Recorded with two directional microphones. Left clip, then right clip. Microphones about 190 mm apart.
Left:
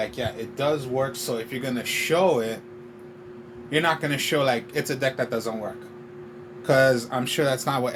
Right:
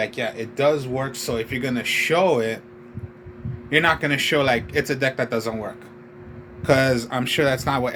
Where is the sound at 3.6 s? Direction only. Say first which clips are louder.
Right 4 dB; 35° right (ahead or behind).